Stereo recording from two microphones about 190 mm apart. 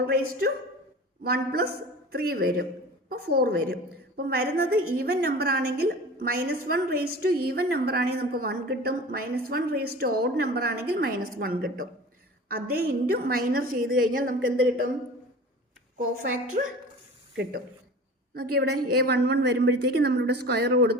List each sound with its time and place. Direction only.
0.0 s a woman's voice: 55° right (ahead or behind)
16.0 s a woman's voice: 45° right (ahead or behind)
18.3 s a woman's voice: 55° right (ahead or behind)